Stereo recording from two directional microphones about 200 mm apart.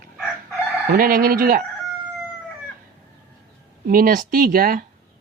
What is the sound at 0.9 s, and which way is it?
Speech, 45° right (ahead or behind).